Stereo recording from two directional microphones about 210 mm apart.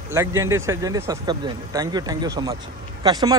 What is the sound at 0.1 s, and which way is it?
Speech, 15° right (ahead or behind).